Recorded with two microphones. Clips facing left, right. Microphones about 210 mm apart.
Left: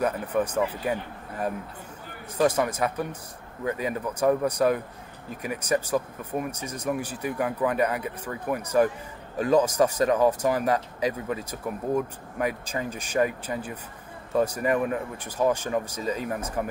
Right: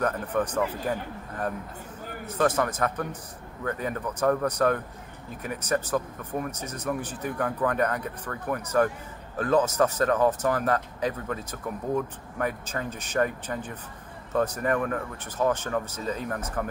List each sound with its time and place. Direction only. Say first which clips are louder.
0.0 s speech: left 1 dB; 10° left (ahead or behind)
2.2 s speech: left 2 dB; 10° left (ahead or behind)